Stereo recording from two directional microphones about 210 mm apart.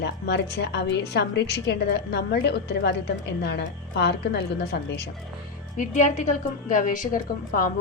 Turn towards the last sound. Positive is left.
turn(degrees=40)  # may be behind; listen again after turning